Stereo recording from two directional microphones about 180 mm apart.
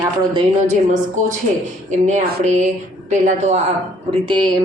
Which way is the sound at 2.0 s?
40° right (ahead or behind).